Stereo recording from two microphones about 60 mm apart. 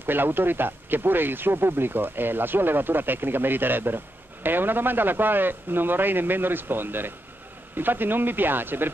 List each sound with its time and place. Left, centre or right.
0.0 s speech: right